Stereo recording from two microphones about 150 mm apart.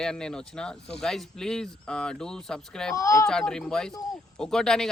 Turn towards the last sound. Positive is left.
turn(degrees=5)  # may be behind; listen again after turning